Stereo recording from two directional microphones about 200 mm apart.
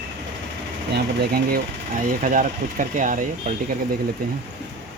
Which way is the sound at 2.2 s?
40° right (ahead or behind).